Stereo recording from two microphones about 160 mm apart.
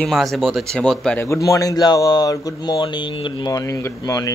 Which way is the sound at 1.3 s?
20° left (ahead or behind).